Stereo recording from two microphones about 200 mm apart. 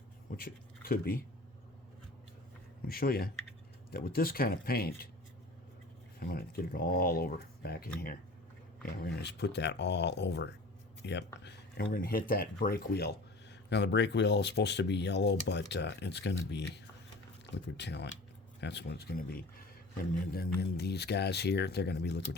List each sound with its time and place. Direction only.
0.3 s speech: 45° left (ahead or behind)
2.8 s speech: 50° left (ahead or behind)
6.1 s speech: 50° left (ahead or behind)